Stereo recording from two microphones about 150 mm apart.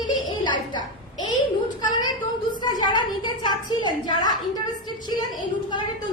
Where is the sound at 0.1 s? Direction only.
30° left (ahead or behind).